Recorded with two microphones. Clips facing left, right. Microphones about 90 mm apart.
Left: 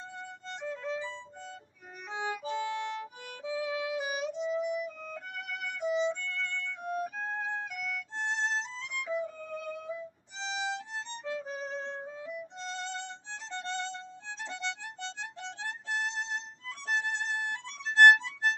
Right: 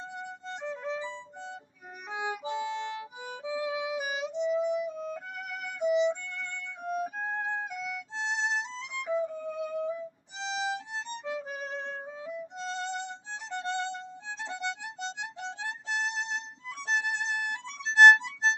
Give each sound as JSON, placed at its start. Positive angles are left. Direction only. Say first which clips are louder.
{"t": 0.2, "sound": "music", "louder": "right 1 dB", "side_deg": -20}
{"t": 12.5, "sound": "violin", "louder": "right 6 dB", "side_deg": -15}
{"t": 16.8, "sound": "music", "louder": "right 2 dB", "side_deg": -15}